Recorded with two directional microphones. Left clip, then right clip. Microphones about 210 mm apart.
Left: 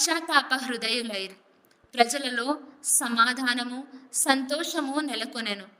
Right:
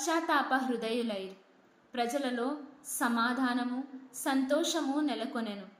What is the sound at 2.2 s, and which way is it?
A woman's voice, 50° left (ahead or behind).